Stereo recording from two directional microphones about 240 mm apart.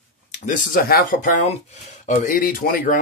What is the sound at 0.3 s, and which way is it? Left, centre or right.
Speech, left.